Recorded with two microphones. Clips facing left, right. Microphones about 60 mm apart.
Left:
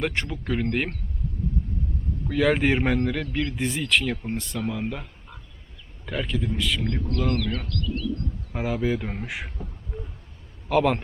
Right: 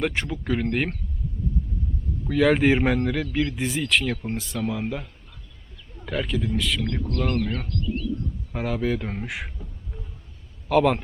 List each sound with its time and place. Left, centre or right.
0.0 s speech: centre
2.2 s speech: centre
6.1 s speech: centre
7.3 s speech: right
8.5 s speech: centre
9.9 s a sound: centre
10.7 s speech: centre